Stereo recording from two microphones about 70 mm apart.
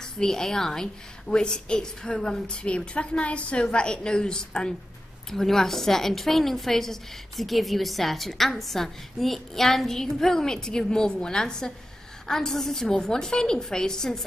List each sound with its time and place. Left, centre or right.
0.2 s a woman's voice: centre